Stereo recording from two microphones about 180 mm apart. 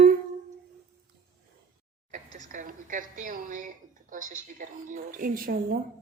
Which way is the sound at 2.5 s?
45° right (ahead or behind).